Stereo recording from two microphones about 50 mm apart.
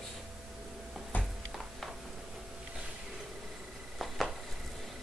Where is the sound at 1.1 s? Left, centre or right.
Left.